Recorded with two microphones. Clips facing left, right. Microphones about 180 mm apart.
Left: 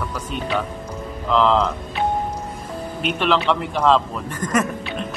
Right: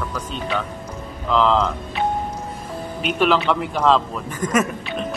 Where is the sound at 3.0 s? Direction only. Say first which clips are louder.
Right 2 dB; centre (ahead or behind).